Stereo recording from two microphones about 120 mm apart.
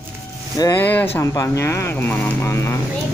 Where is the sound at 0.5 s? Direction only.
30° left (ahead or behind).